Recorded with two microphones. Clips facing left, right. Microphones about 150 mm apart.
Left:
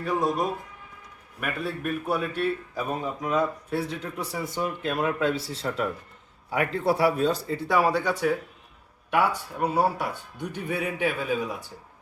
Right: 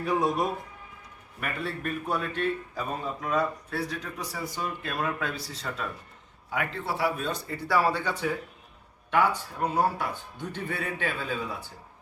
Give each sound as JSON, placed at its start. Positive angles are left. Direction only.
{"t": 0.0, "sound": "a man's voice", "side_deg": 0}
{"t": 7.2, "sound": "speech", "side_deg": 35}
{"t": 7.7, "sound": "a man's voice", "side_deg": 15}